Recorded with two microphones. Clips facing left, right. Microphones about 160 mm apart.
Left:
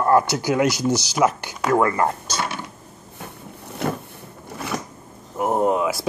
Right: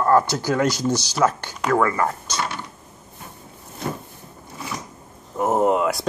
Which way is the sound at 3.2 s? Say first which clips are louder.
Left 5 dB; 70° left (ahead or behind).